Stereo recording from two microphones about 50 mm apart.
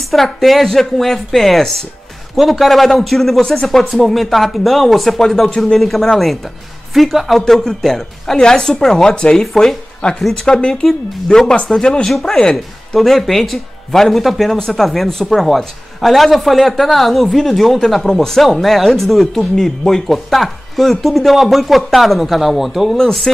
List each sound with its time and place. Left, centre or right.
0.1 s a woman's voice: centre
13.0 s speech: centre
22.9 s a woman's voice: centre